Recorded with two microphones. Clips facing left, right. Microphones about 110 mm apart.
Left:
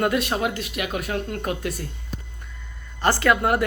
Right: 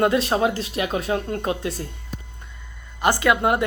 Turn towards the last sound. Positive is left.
turn(degrees=-20)  # may be behind; listen again after turning